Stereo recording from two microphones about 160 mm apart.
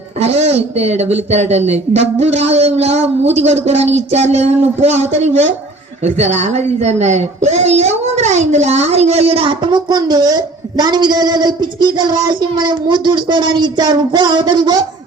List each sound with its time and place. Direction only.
0.2 s a man's voice: 40° right (ahead or behind); by 14.8 s 25° right (ahead or behind)